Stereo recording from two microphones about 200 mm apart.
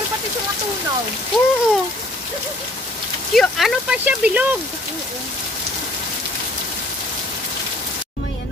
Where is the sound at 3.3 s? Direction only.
Centre (ahead or behind).